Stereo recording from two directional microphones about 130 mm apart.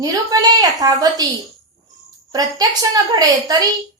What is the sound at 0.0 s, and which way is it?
A woman's voice, 30° right (ahead or behind).